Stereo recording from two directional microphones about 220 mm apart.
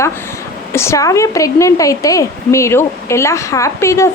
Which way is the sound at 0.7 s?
10° left (ahead or behind).